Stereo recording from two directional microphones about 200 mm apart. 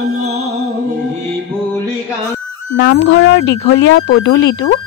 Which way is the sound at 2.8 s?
60° left (ahead or behind).